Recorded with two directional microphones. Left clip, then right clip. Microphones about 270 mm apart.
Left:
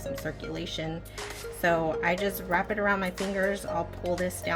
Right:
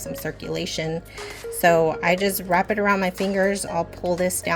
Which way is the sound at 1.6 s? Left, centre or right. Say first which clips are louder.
Right 8 dB; right.